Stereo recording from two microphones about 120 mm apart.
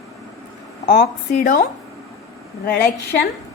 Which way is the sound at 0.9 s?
90° left.